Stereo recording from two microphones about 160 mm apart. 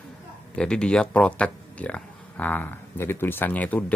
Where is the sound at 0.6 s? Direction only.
5° left (ahead or behind).